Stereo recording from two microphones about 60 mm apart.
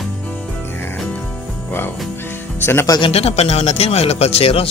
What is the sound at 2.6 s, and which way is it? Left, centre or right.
Speech, left.